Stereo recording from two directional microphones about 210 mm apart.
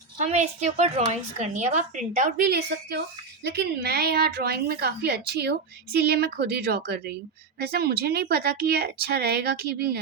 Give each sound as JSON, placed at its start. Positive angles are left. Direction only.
{"t": 0.2, "sound": "a woman's voice", "side_deg": -35}